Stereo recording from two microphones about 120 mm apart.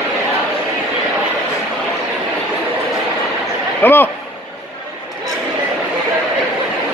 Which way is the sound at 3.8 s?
15° left (ahead or behind).